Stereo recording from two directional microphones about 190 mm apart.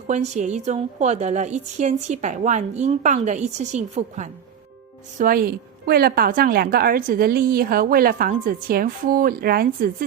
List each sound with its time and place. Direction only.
0.1 s a woman's voice: 35° right (ahead or behind); by 9.9 s 50° right (ahead or behind)